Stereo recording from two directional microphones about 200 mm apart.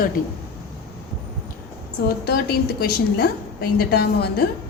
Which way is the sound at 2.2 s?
50° left (ahead or behind).